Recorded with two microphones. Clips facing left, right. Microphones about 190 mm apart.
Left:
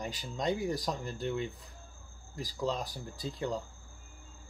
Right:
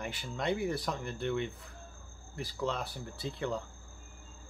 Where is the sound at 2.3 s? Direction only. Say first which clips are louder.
Left 1 dB; 35° left (ahead or behind).